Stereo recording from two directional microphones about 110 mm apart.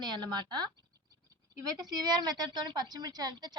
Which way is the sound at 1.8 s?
35° right (ahead or behind).